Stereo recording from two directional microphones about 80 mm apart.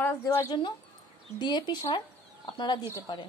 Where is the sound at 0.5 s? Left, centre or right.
Left.